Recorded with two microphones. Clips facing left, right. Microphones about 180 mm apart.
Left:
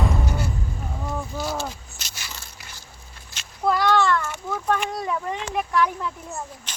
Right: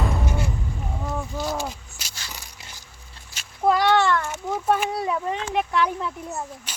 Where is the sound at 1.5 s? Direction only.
15° right (ahead or behind).